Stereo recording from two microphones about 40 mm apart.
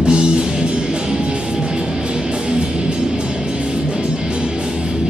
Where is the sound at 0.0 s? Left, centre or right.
Right.